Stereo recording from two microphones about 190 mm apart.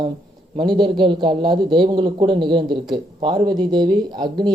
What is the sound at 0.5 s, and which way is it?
A man's voice, 25° right (ahead or behind).